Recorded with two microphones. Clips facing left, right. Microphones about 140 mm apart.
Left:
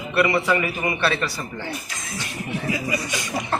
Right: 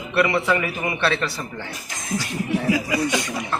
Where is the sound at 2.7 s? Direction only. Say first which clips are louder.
Right 3 dB; 85° right.